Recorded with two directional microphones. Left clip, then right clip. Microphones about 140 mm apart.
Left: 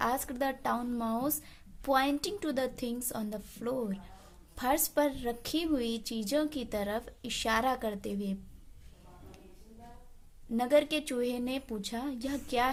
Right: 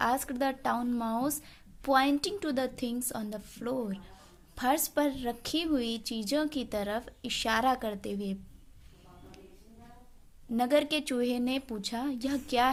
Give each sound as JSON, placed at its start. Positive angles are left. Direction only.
{"t": 0.0, "sound": "a woman's voice", "side_deg": -15}
{"t": 10.5, "sound": "a woman's voice", "side_deg": -15}